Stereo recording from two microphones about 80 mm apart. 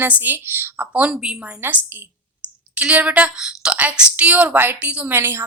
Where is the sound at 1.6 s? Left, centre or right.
Right.